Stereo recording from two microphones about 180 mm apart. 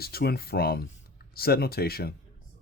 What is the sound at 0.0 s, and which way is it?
Speech, 60° left (ahead or behind).